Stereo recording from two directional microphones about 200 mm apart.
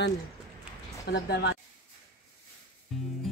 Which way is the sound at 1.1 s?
55° left (ahead or behind).